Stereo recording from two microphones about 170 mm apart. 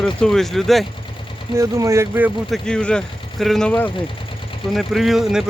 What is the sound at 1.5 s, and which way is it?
Speech, 15° right (ahead or behind).